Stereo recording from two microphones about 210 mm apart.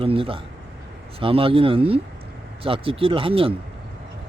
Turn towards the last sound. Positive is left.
turn(degrees=-25)  # may be behind; listen again after turning